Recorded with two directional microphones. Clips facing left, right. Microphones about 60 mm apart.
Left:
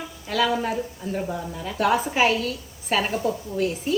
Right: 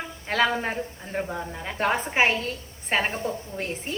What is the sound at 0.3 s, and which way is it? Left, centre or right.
Stir, right.